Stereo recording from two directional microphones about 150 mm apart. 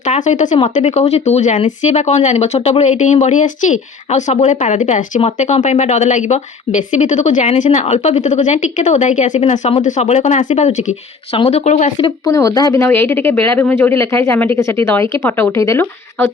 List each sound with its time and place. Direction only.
0.0 s speech: 55° left (ahead or behind)
11.3 s speech: 40° left (ahead or behind)
11.9 s speech: 30° left (ahead or behind)